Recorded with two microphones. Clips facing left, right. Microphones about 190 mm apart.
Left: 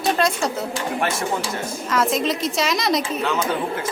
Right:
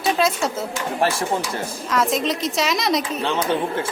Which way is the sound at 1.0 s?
30° right (ahead or behind).